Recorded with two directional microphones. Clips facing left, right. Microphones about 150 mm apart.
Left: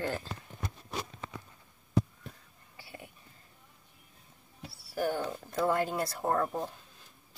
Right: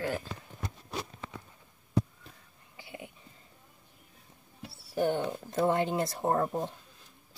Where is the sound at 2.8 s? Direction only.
20° right (ahead or behind).